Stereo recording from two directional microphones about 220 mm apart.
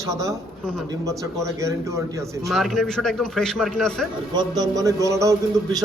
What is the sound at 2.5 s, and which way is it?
A man's voice, centre (ahead or behind).